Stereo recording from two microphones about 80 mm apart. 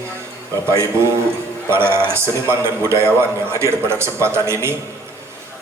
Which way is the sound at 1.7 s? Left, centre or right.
Right.